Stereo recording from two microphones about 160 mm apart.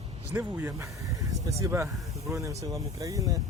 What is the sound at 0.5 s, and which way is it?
Speech, 20° right (ahead or behind).